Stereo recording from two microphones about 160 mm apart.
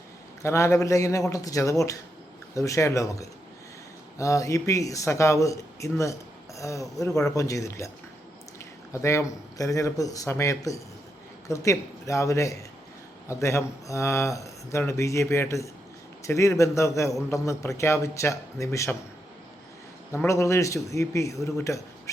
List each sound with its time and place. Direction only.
0.4 s speech: 20° left (ahead or behind)
20.2 s speech: 20° left (ahead or behind)